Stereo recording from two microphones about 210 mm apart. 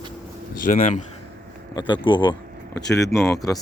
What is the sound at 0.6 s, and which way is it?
Speech, 40° left (ahead or behind).